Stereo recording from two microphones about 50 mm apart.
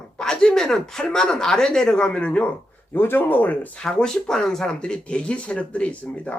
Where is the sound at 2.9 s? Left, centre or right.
Left.